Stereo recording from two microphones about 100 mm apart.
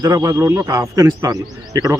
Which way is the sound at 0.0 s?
30° right (ahead or behind).